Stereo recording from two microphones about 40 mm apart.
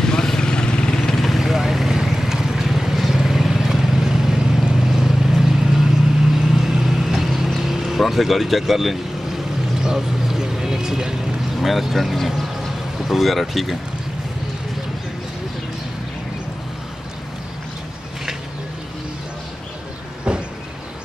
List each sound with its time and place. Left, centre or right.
0.0 s vehicle: centre
1.1 s vehicle: centre
9.8 s vehicle: centre
11.6 s speech: centre
20.3 s vehicle: right